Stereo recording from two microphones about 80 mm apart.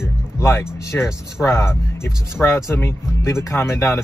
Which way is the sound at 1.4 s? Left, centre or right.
Left.